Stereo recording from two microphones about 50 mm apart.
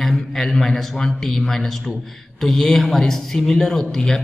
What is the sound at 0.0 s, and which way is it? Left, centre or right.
A man's voice, centre.